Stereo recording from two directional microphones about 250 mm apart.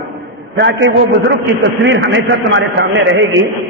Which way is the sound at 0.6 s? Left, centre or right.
Right.